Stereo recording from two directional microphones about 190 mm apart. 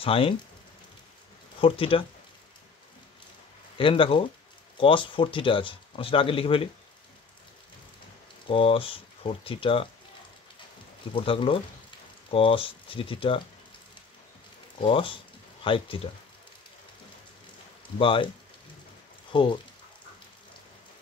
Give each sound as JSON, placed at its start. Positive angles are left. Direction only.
{"t": 0.0, "sound": "speech", "side_deg": 30}
{"t": 1.6, "sound": "speech", "side_deg": 30}
{"t": 3.7, "sound": "speech", "side_deg": 25}
{"t": 8.5, "sound": "speech", "side_deg": 30}
{"t": 11.1, "sound": "speech", "side_deg": 25}
{"t": 14.8, "sound": "speech", "side_deg": 30}
{"t": 17.9, "sound": "speech", "side_deg": 25}
{"t": 19.3, "sound": "speech", "side_deg": 25}